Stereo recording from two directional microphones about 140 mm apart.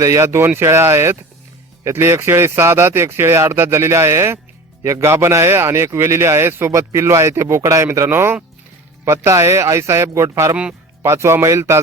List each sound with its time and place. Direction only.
0.0 s speech: 20° right (ahead or behind)